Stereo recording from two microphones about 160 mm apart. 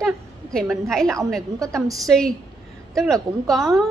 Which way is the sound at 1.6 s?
20° right (ahead or behind).